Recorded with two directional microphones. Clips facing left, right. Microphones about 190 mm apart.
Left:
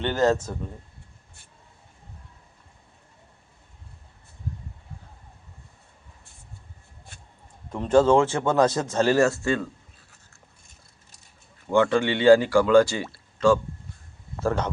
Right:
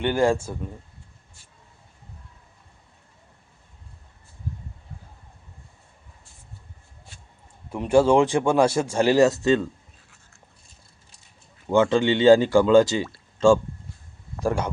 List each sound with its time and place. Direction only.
0.0 s speech: 10° right (ahead or behind)
7.7 s speech: 10° right (ahead or behind)
11.7 s speech: 20° right (ahead or behind)
14.3 s speech: 10° right (ahead or behind)